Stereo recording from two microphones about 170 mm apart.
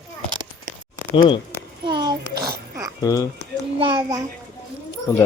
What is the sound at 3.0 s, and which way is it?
Speech, 20° left (ahead or behind).